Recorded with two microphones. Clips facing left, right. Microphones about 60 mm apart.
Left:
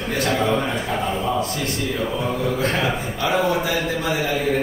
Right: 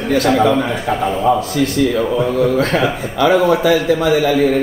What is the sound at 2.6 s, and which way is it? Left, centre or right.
A man's voice, right.